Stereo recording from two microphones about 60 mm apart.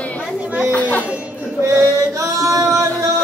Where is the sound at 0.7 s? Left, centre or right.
Left.